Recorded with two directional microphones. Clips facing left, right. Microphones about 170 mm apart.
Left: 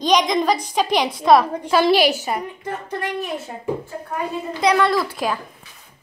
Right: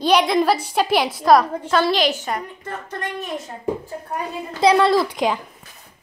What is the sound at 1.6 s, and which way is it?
A woman's voice, 10° left (ahead or behind).